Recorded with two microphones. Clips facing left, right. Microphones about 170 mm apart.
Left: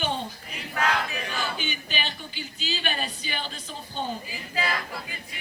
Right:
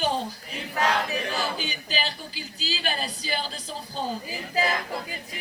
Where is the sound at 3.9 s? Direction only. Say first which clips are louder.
Right 1 dB; 40° right (ahead or behind).